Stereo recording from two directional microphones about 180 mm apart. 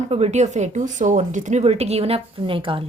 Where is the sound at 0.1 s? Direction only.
35° right (ahead or behind).